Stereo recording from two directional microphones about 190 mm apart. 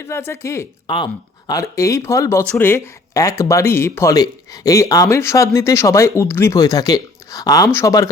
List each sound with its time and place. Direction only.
0.0 s speech: 15° left (ahead or behind)